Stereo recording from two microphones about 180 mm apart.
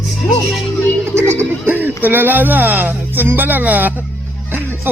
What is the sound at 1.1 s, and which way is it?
Music, 15° right (ahead or behind).